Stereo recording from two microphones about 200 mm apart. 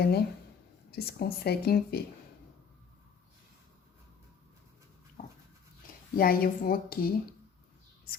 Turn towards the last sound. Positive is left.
turn(degrees=50)  # may be behind; listen again after turning